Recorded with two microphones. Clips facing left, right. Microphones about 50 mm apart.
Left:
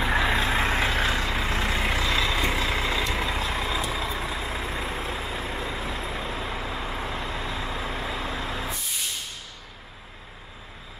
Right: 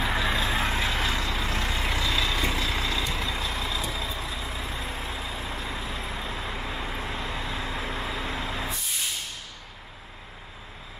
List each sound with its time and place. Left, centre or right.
0.0 s vehicle: left
0.5 s vehicle: centre
0.7 s vehicle: left
5.4 s vehicle: centre